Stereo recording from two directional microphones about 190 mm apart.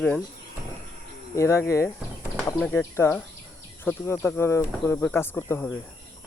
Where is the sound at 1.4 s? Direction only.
15° left (ahead or behind).